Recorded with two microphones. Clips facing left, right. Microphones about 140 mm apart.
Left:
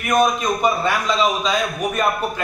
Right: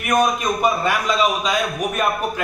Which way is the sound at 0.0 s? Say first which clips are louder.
Left 1 dB; 10° right (ahead or behind).